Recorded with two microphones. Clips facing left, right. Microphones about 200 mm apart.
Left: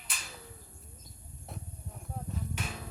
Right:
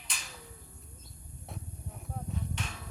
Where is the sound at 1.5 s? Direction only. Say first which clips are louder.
Right 1 dB; centre (ahead or behind).